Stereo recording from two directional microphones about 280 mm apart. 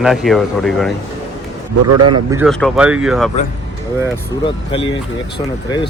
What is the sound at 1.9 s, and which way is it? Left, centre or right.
Speech, right.